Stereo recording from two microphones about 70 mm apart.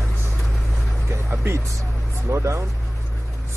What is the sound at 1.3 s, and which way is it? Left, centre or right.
A man's voice, right.